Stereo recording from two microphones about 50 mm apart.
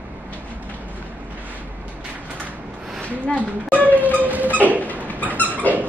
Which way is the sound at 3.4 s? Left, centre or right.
Right.